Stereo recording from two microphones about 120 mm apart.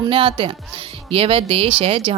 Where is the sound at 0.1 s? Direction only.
45° right (ahead or behind).